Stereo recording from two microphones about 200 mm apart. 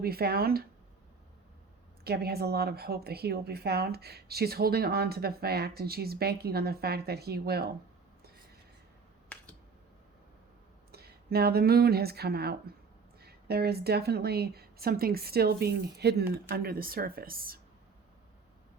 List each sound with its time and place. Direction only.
0.0 s a woman's voice: 50° right (ahead or behind)
2.0 s a woman's voice: 50° right (ahead or behind)
10.9 s a woman's voice: 50° right (ahead or behind)